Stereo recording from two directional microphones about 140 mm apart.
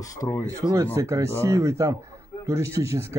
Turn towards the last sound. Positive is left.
turn(degrees=-20)  # may be behind; listen again after turning